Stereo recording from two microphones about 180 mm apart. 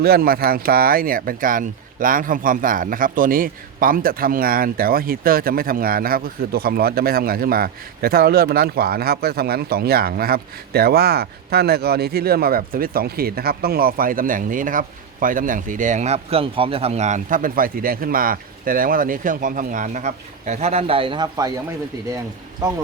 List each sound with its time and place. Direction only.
0.0 s speech: 55° right (ahead or behind); by 21.5 s 20° right (ahead or behind)